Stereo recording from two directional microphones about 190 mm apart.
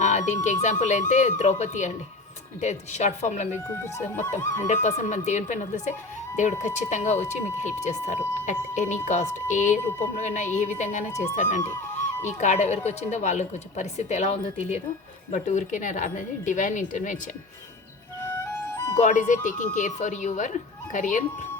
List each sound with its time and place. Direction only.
0.0 s a woman's voice: 40° left (ahead or behind)
4.6 s a woman's voice: 40° left (ahead or behind)
18.5 s music: 10° left (ahead or behind)
18.9 s a woman's voice: 40° left (ahead or behind)